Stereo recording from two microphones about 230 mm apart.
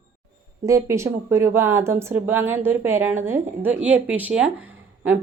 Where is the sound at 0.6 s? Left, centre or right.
Centre.